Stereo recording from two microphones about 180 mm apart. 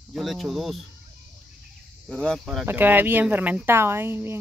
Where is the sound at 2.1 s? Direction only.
5° left (ahead or behind).